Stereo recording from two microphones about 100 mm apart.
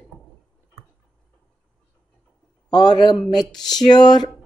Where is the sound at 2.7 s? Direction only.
45° left (ahead or behind).